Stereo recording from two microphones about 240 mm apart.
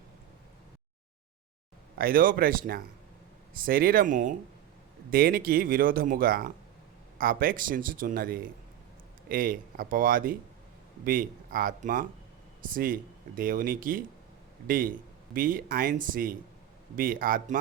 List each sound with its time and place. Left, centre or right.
2.0 s speech: right